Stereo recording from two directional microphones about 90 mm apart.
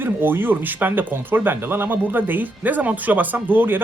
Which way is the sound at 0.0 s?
25° right (ahead or behind).